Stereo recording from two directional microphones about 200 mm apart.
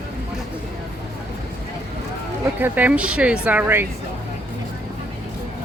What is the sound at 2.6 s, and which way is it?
Speech, 10° right (ahead or behind).